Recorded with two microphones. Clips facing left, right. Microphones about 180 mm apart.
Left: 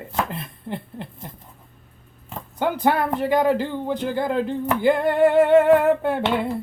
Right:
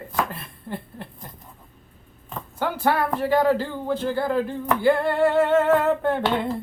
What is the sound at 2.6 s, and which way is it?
A man's voice, 20° left (ahead or behind).